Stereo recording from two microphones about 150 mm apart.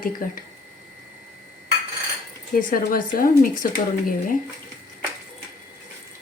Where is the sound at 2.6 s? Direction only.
65° left (ahead or behind).